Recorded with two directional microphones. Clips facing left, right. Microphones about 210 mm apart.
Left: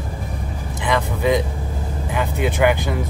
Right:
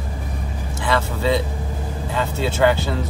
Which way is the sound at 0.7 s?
15° left (ahead or behind).